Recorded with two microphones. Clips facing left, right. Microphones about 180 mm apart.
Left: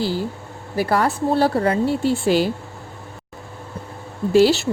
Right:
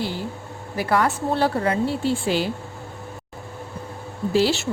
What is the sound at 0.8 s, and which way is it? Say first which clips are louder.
Speech: left 2 dB; 35° left (ahead or behind).